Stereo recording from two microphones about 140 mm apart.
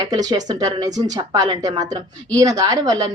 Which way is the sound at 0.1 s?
25° right (ahead or behind).